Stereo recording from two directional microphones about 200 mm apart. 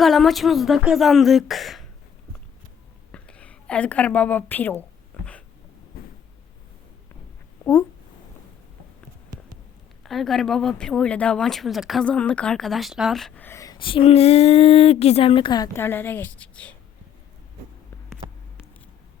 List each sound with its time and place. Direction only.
0.0 s speech: centre (ahead or behind)
3.1 s a sound: 5° left (ahead or behind)
5.9 s cupboard open or close: 50° left (ahead or behind)
7.6 s speech: 15° left (ahead or behind)
10.0 s speech: centre (ahead or behind)